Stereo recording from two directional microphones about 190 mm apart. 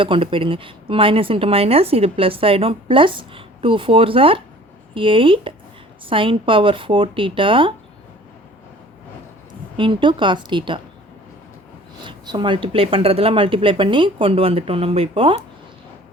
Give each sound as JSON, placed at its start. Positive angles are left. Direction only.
{"t": 0.0, "sound": "a woman's voice", "side_deg": -25}
{"t": 9.7, "sound": "a woman's voice", "side_deg": -25}
{"t": 12.0, "sound": "a woman's voice", "side_deg": -25}